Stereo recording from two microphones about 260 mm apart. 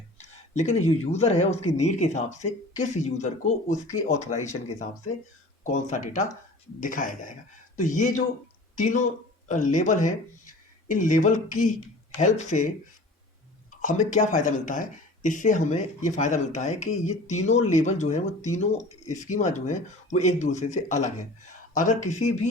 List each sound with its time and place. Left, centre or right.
0.5 s speech: left
5.6 s speech: left